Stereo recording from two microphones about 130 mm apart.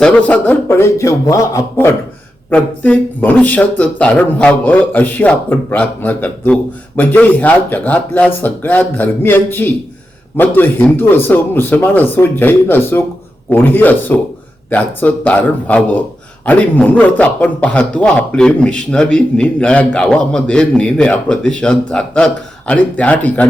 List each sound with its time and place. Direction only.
0.0 s a man's voice: 10° left (ahead or behind)